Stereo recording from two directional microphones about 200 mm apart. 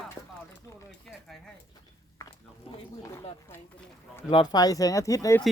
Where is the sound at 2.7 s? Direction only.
30° left (ahead or behind).